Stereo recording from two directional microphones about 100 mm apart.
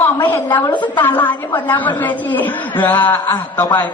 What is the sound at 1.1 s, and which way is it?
A man's voice, 20° left (ahead or behind).